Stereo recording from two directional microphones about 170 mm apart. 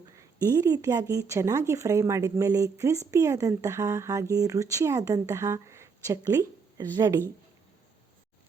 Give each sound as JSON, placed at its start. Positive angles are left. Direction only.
{"t": 0.2, "sound": "speech", "side_deg": -20}